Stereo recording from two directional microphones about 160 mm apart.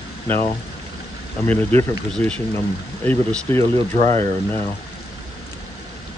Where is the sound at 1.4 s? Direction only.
15° left (ahead or behind).